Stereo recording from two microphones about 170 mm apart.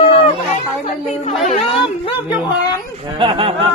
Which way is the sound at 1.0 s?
45° left (ahead or behind).